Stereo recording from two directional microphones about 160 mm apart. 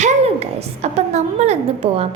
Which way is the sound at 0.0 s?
45° right (ahead or behind).